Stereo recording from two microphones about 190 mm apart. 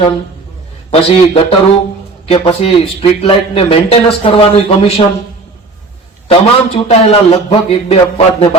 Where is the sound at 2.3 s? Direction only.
30° left (ahead or behind).